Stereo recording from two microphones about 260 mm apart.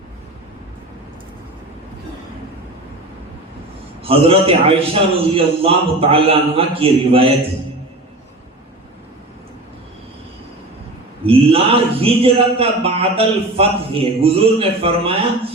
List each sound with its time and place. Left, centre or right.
4.0 s a man's voice: right
11.3 s a man's voice: right